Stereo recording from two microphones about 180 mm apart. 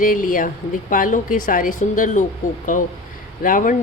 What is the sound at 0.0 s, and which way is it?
Speech, 50° left (ahead or behind).